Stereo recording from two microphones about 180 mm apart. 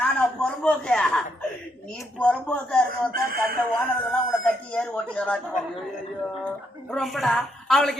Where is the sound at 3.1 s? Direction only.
55° right (ahead or behind).